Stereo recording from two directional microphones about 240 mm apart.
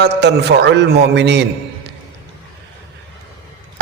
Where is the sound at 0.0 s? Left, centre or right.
Right.